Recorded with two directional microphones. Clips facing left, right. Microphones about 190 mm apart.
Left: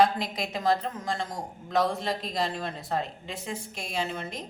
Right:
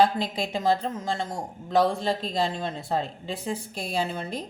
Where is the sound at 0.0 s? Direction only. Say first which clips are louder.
Right 1 dB; 30° right (ahead or behind).